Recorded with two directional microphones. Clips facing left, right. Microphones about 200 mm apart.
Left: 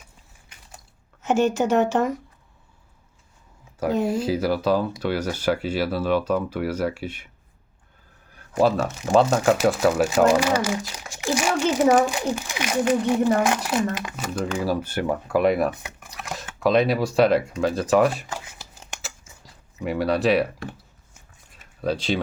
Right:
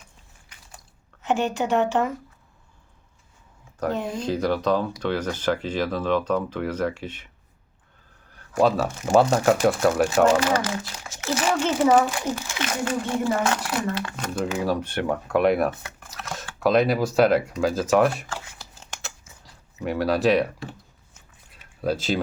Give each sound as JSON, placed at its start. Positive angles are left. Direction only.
{"t": 1.2, "sound": "a woman's voice", "side_deg": 45}
{"t": 3.8, "sound": "speech", "side_deg": 10}
{"t": 8.6, "sound": "a child's voice", "side_deg": -5}
{"t": 14.3, "sound": "speech", "side_deg": -5}
{"t": 15.7, "sound": "speech", "side_deg": 15}
{"t": 16.6, "sound": "speech", "side_deg": 0}
{"t": 19.8, "sound": "speech", "side_deg": 0}
{"t": 21.8, "sound": "speech", "side_deg": 0}